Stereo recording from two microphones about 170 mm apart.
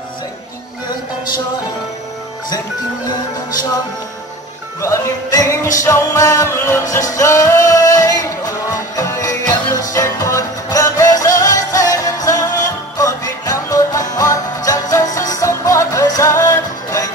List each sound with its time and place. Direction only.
4.8 s music: 20° left (ahead or behind)